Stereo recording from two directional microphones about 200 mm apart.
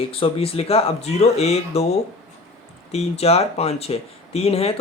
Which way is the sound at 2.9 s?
30° left (ahead or behind).